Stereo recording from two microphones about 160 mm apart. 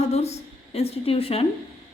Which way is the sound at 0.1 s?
40° left (ahead or behind).